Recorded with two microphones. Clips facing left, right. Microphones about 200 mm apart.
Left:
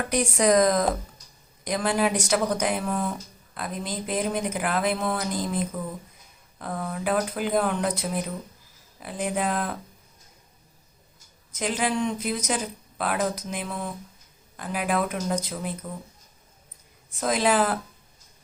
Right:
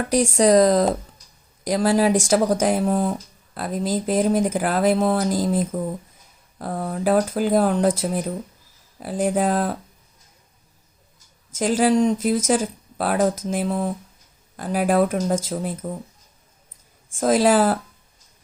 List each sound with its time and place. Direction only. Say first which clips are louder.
0.3 s speech: right 5 dB; 35° right (ahead or behind)
11.5 s speech: right 8 dB; 45° right (ahead or behind)
17.1 s speech: right 6 dB; 45° right (ahead or behind)